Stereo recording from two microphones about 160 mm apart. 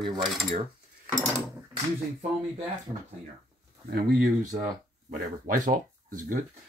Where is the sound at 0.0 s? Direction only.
30° right (ahead or behind).